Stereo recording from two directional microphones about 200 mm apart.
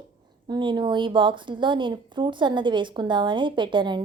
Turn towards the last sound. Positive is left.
turn(degrees=-25)  # may be behind; listen again after turning